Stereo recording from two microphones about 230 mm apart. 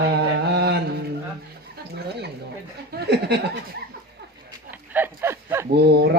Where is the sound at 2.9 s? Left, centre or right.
Right.